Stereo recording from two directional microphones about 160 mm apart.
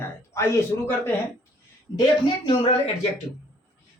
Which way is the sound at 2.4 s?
35° left (ahead or behind).